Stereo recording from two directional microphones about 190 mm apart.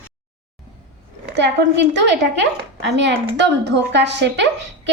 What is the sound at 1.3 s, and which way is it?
A woman's voice, 65° right (ahead or behind).